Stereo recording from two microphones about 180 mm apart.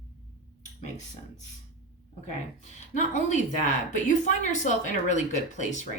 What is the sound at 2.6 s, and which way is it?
A woman's voice, 40° left (ahead or behind).